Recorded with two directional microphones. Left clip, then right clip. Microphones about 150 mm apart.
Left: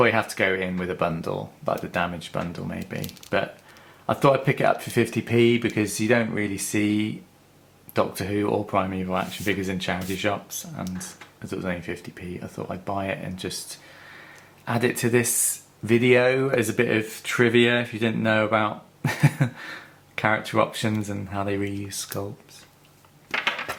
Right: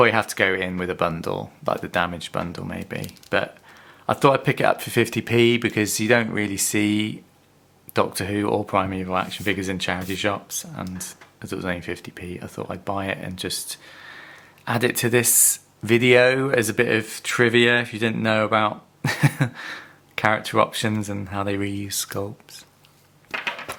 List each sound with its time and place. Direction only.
0.0 s speech: 35° right (ahead or behind)